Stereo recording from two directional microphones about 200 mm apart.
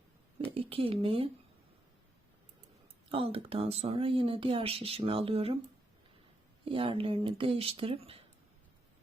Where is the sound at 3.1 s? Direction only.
25° right (ahead or behind).